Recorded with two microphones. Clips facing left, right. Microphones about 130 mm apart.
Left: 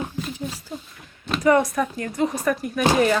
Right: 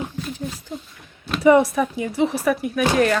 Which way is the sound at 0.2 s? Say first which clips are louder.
Even; 10° left (ahead or behind).